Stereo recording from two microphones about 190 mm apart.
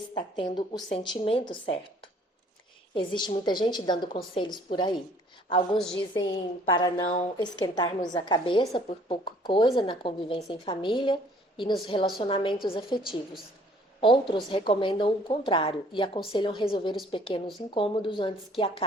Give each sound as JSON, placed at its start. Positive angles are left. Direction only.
{"t": 0.1, "sound": "speech", "side_deg": 25}
{"t": 2.9, "sound": "speech", "side_deg": 25}
{"t": 14.0, "sound": "speech", "side_deg": 25}